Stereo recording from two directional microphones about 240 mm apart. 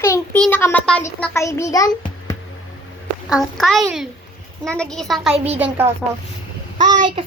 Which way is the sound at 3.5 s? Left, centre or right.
Centre.